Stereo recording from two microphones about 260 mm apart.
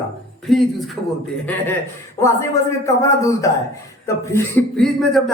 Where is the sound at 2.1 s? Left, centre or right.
Centre.